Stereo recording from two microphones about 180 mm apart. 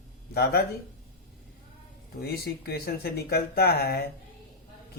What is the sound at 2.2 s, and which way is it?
Speech, 60° left (ahead or behind).